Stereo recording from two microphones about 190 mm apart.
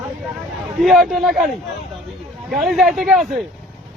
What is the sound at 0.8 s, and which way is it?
Speech, centre (ahead or behind).